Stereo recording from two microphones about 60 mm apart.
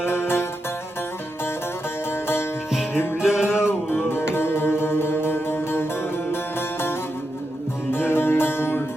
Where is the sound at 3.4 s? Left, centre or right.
Left.